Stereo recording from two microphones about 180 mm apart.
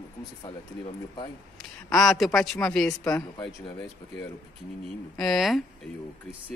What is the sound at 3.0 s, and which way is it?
Speech, 20° left (ahead or behind).